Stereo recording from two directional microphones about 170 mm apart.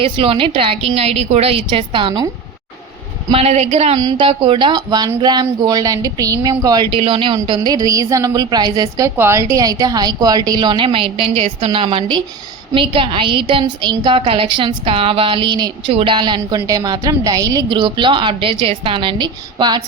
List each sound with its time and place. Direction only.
0.0 s a woman's voice: 30° right (ahead or behind)
3.3 s a woman's voice: 40° right (ahead or behind)
3.9 s a woman's voice: 25° right (ahead or behind)